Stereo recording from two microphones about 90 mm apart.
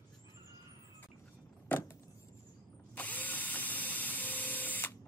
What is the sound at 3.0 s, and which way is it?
Drill, 20° left (ahead or behind).